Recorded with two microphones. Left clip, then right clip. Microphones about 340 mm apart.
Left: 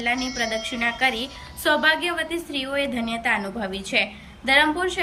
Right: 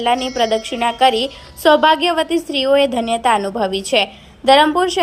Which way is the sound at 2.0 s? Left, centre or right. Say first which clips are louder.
Right 9 dB; centre.